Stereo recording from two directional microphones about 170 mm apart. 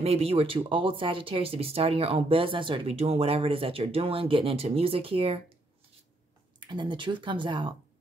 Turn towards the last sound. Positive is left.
turn(degrees=-30)  # may be behind; listen again after turning